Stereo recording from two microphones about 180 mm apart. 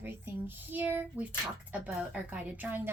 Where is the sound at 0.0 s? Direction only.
10° right (ahead or behind).